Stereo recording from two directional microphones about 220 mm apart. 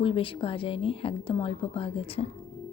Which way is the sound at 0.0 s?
25° left (ahead or behind).